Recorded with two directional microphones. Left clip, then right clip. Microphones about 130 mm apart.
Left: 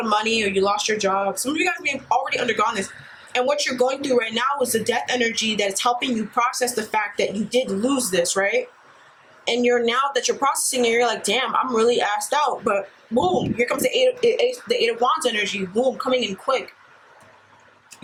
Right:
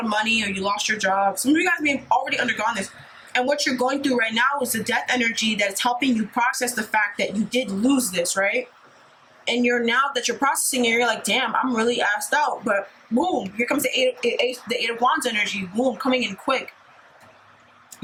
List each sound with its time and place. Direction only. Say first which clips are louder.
0.0 s speech: left 2 dB; 15° left (ahead or behind)